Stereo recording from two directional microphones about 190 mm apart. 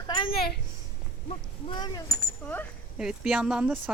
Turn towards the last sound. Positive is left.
turn(degrees=-5)  # may be behind; listen again after turning